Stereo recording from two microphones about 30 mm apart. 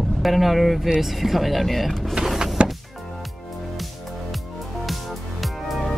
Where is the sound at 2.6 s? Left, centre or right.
Right.